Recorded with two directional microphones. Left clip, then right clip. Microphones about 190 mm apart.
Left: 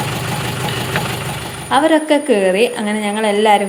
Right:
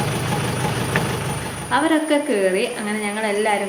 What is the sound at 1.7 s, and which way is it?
A woman's voice, 30° left (ahead or behind).